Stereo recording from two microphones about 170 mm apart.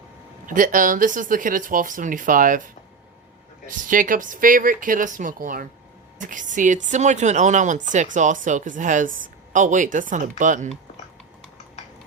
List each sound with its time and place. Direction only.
0.4 s speech: 50° right (ahead or behind)
3.8 s speech: 50° right (ahead or behind)